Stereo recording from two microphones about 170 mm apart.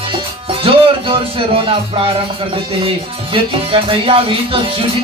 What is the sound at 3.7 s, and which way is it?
Music, 30° right (ahead or behind).